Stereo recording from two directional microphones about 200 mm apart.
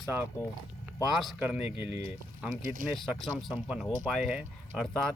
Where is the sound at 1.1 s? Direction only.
Centre (ahead or behind).